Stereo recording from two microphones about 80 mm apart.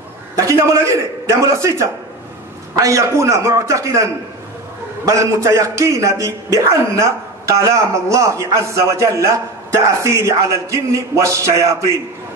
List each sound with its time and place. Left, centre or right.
0.4 s a man's voice: right